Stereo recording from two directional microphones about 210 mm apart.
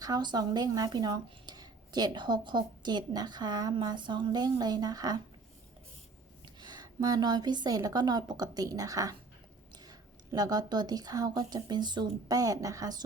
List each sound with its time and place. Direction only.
0.0 s speech: 20° right (ahead or behind)
6.6 s speech: 20° right (ahead or behind)
10.3 s a woman's voice: 20° right (ahead or behind)